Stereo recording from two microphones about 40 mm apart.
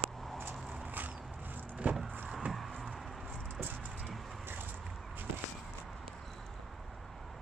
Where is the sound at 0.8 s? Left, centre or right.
Right.